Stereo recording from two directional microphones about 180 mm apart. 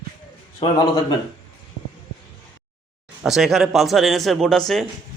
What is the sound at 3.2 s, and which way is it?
A man's voice, centre (ahead or behind).